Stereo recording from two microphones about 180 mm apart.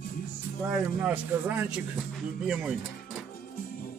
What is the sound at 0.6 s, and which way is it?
A man's voice, 5° right (ahead or behind).